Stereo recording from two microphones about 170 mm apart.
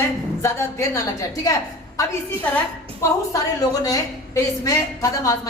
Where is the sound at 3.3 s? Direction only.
20° left (ahead or behind).